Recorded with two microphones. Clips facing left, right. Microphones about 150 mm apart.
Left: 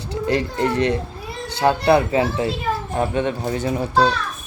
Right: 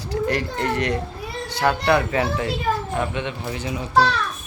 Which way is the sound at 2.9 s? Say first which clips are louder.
Left 4 dB; 45° left (ahead or behind).